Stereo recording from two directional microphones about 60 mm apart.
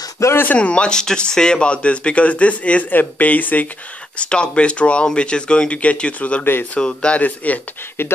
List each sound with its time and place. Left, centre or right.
0.2 s speech: left
0.6 s speech: centre
4.2 s speech: centre